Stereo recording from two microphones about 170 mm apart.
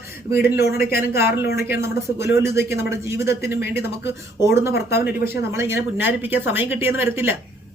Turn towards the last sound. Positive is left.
turn(degrees=-15)  # may be behind; listen again after turning